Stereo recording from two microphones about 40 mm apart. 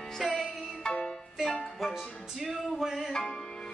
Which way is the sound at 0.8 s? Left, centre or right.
Centre.